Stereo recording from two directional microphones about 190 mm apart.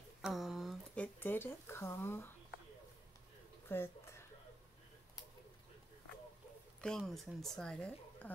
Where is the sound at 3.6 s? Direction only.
10° left (ahead or behind).